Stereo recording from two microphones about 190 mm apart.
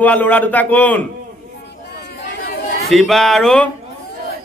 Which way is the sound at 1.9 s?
55° left (ahead or behind).